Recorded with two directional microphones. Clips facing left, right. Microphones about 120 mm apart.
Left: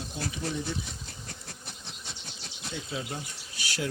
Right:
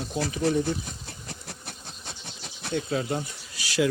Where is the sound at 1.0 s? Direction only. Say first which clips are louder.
Right 4 dB; 70° right (ahead or behind).